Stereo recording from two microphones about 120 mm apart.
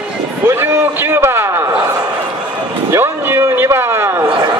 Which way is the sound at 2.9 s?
20° right (ahead or behind).